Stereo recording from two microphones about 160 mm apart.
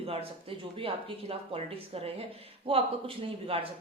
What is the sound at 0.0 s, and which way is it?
Speech, 35° right (ahead or behind).